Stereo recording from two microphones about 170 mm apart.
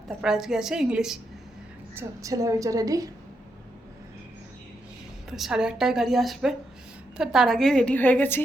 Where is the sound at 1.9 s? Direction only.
20° right (ahead or behind).